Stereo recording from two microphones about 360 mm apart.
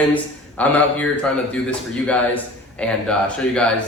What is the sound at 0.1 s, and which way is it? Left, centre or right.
Speech, centre.